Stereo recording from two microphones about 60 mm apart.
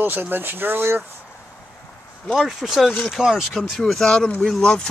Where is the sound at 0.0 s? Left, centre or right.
Right.